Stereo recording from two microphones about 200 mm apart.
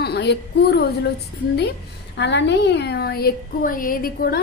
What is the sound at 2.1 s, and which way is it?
A woman's voice, 60° left (ahead or behind).